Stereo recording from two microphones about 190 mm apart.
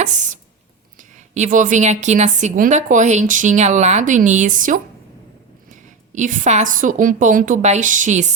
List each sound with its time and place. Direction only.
0.0 s a woman's voice: 40° right (ahead or behind)
6.1 s a woman's voice: 40° right (ahead or behind)